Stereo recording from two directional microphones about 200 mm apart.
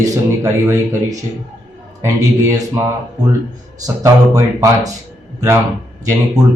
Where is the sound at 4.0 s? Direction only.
15° right (ahead or behind).